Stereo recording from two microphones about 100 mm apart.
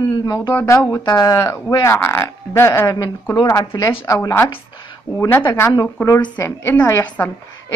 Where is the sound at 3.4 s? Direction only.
35° left (ahead or behind).